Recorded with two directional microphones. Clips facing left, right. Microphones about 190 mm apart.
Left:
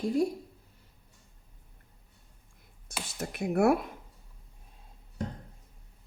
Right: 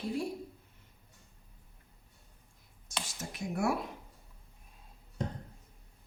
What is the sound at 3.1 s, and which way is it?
Speech, 60° left (ahead or behind).